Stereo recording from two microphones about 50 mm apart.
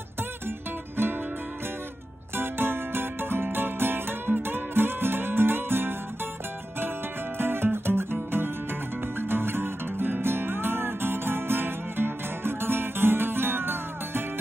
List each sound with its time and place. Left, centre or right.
2.3 s music: right
7.3 s music: right